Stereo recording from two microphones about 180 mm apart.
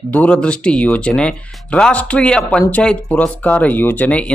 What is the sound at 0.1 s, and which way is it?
Speech, 5° left (ahead or behind).